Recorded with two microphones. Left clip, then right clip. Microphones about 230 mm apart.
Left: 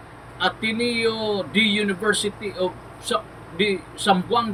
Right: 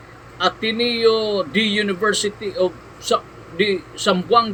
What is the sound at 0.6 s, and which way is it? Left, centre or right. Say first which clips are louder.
A man's voice: right 5 dB; centre.